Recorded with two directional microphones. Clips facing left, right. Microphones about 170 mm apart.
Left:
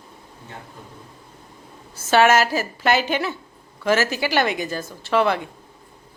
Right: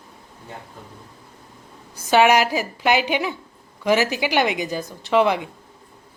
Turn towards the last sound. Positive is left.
turn(degrees=-15)  # may be behind; listen again after turning